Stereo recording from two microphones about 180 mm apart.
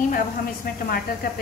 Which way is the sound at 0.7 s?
55° left (ahead or behind).